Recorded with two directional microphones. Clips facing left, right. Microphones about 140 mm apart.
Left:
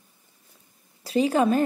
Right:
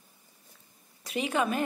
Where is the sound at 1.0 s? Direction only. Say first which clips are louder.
Left 8 dB; 35° left (ahead or behind).